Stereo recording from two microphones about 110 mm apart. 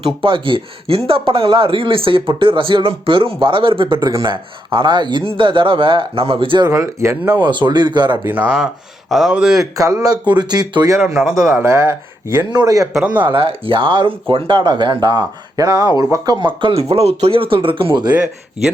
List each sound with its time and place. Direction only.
0.0 s speech: 50° right (ahead or behind)
6.7 s speech: 25° right (ahead or behind)
7.3 s speech: 45° right (ahead or behind)
8.2 s speech: 15° right (ahead or behind)
9.7 s speech: 35° right (ahead or behind)
11.0 s speech: 5° right (ahead or behind)
11.6 s speech: 25° right (ahead or behind)
12.5 s speech: 35° right (ahead or behind)
12.9 s speech: 5° right (ahead or behind)
13.2 s speech: 55° right (ahead or behind)